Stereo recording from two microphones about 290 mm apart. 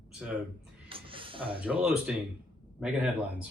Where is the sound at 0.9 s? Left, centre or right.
Centre.